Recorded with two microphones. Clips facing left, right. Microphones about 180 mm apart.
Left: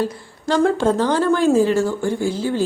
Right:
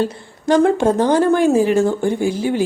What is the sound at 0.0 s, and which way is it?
A woman's voice, 25° right (ahead or behind).